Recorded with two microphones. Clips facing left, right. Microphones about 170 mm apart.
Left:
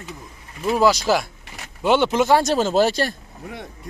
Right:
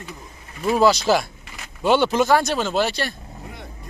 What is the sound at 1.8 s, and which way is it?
Speech, 20° left (ahead or behind).